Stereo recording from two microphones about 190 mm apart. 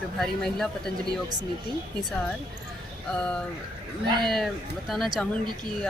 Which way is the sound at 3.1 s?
5° left (ahead or behind).